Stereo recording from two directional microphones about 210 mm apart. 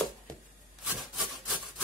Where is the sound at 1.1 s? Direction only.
Centre (ahead or behind).